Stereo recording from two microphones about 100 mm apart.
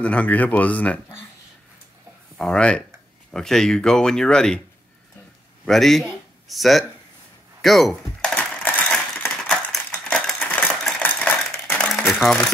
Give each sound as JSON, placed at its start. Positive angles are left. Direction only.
{"t": 0.0, "sound": "speech", "side_deg": 15}
{"t": 2.3, "sound": "speech", "side_deg": 5}
{"t": 5.7, "sound": "speech", "side_deg": 0}
{"t": 8.5, "sound": "crushing", "side_deg": 15}
{"t": 9.3, "sound": "crushing", "side_deg": 5}
{"t": 10.4, "sound": "a sound", "side_deg": 20}
{"t": 10.7, "sound": "a sound", "side_deg": 5}
{"t": 11.0, "sound": "a sound", "side_deg": 15}
{"t": 12.1, "sound": "speech", "side_deg": 0}